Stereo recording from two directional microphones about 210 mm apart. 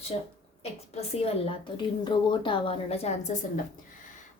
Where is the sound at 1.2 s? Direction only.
25° left (ahead or behind).